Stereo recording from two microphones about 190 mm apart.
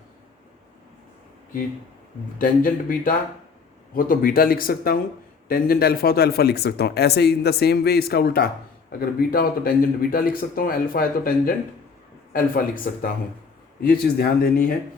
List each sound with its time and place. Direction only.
2.4 s speech: 45° left (ahead or behind)